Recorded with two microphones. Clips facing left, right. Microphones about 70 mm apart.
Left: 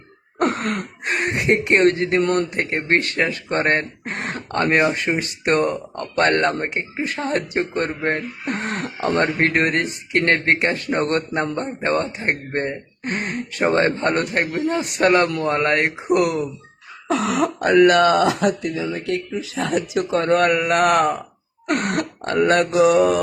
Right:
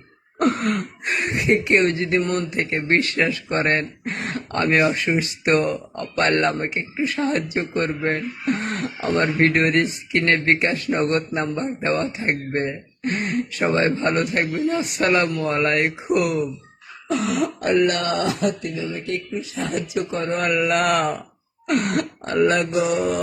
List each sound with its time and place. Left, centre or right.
0.3 s speech: left
2.2 s speech: left
2.6 s speech: left
11.8 s speech: left
17.1 s speech: left
20.6 s speech: left
21.7 s burping: left
22.4 s mantra: left